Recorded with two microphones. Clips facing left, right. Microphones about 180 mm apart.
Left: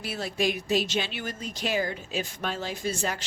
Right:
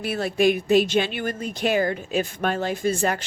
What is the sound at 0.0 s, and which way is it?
A woman's voice, 55° right (ahead or behind).